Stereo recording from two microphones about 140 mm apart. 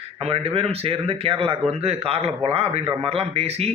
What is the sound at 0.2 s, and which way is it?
A man's voice, 45° right (ahead or behind).